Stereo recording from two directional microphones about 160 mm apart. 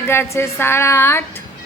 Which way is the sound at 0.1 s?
15° left (ahead or behind).